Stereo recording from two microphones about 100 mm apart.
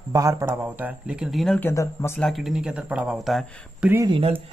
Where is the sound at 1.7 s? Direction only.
30° left (ahead or behind).